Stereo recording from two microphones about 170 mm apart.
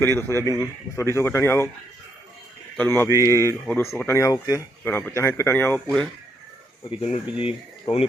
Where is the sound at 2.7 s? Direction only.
10° left (ahead or behind).